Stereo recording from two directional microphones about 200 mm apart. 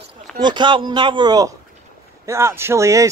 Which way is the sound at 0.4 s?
20° right (ahead or behind).